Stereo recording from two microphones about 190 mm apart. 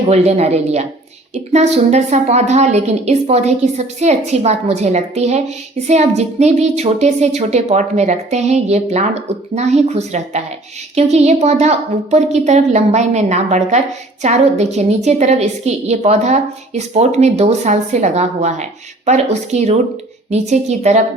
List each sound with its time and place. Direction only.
0.1 s a woman's voice: 35° right (ahead or behind)